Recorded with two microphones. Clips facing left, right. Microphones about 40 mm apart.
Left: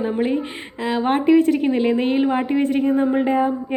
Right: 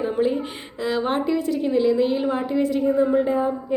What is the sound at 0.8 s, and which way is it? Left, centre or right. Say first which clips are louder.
Speech: left 3 dB; left.